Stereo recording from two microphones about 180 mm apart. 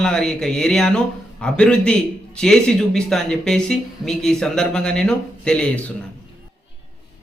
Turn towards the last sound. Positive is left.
turn(degrees=5)  # may be behind; listen again after turning